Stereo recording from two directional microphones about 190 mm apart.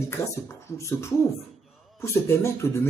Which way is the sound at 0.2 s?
15° left (ahead or behind).